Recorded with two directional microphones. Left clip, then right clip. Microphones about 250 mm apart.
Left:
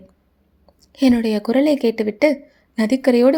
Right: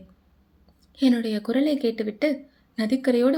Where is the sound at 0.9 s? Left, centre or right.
Left.